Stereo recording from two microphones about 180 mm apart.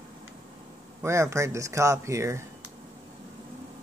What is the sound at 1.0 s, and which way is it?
Speech, 15° right (ahead or behind).